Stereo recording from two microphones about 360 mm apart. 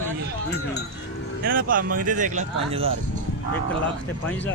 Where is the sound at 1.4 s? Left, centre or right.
Right.